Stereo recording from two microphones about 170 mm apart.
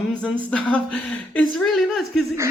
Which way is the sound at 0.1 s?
5° left (ahead or behind).